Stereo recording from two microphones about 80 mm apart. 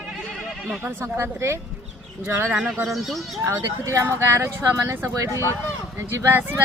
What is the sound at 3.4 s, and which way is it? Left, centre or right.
Speech, right.